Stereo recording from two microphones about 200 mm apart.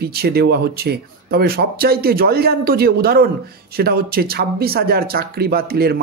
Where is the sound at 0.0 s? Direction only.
50° right (ahead or behind).